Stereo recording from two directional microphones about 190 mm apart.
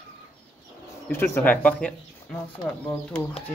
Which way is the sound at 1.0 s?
10° left (ahead or behind).